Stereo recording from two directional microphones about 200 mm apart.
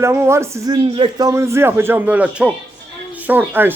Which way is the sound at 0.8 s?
25° right (ahead or behind).